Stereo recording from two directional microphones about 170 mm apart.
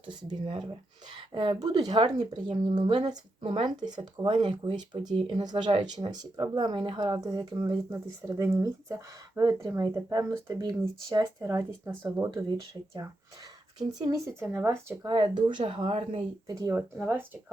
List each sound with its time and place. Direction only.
0.1 s speech: 25° right (ahead or behind)
14.3 s speech: 15° right (ahead or behind)
15.1 s speech: 30° right (ahead or behind)
16.5 s speech: 20° right (ahead or behind)
17.0 s speech: 10° right (ahead or behind)